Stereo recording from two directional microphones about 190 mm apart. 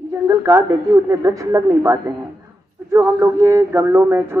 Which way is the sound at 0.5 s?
15° right (ahead or behind).